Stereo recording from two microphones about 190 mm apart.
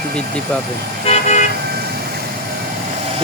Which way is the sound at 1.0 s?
35° left (ahead or behind).